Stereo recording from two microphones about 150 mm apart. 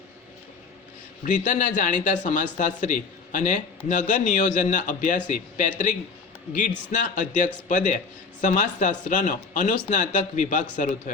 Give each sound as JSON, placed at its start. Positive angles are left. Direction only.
{"t": 1.2, "sound": "a man's voice", "side_deg": 55}